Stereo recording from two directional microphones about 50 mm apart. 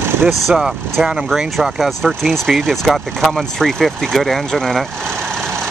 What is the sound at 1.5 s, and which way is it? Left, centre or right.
Speech, centre.